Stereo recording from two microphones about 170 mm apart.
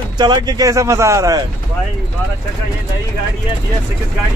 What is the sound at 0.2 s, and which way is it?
Speech, 25° right (ahead or behind).